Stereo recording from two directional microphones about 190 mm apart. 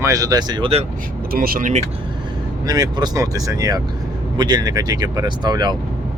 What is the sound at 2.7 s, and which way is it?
Speech, 20° right (ahead or behind).